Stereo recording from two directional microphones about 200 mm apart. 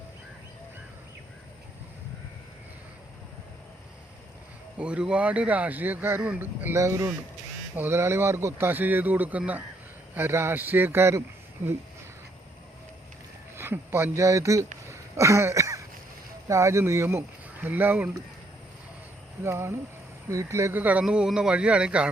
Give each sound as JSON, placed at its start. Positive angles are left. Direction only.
{"t": 4.8, "sound": "speech", "side_deg": -5}
{"t": 13.6, "sound": "speech", "side_deg": -10}
{"t": 14.8, "sound": "a sound", "side_deg": -15}
{"t": 16.5, "sound": "speech", "side_deg": -15}
{"t": 19.4, "sound": "speech", "side_deg": -15}